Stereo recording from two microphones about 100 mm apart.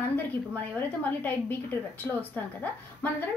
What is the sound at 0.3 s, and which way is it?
A woman's voice, 20° left (ahead or behind).